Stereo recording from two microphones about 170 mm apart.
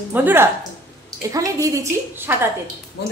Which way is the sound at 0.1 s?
10° right (ahead or behind).